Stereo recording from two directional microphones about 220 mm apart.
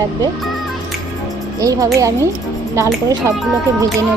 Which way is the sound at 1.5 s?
15° right (ahead or behind).